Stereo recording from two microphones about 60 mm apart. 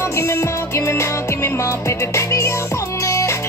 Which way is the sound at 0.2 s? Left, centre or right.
Left.